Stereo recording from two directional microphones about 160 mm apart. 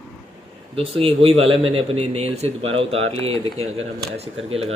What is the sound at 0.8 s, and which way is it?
A man's voice, 35° right (ahead or behind).